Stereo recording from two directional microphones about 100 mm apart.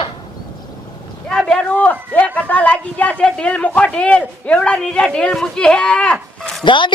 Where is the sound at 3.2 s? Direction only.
10° left (ahead or behind).